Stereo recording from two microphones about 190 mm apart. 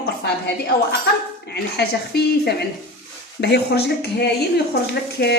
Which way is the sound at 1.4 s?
60° left (ahead or behind).